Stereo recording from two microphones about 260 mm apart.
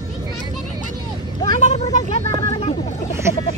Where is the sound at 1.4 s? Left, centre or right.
Left.